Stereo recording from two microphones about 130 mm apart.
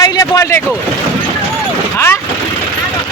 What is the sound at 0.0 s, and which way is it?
Speech, 25° left (ahead or behind).